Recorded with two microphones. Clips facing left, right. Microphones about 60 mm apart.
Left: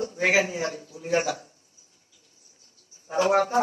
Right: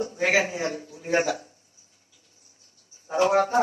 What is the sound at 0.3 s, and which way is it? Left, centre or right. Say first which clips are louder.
A man's voice: even; right.